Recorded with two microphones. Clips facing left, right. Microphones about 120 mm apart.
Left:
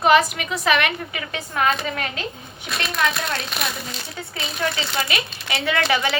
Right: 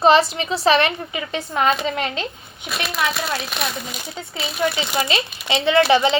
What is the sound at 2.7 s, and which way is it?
Speech, 5° right (ahead or behind).